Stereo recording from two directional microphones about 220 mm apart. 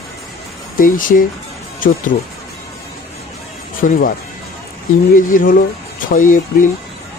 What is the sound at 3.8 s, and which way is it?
Speech, 35° left (ahead or behind).